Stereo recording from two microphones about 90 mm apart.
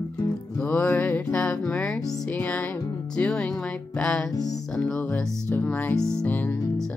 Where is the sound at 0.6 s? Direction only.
15° left (ahead or behind).